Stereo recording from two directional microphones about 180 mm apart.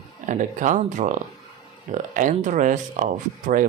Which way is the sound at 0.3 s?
45° right (ahead or behind).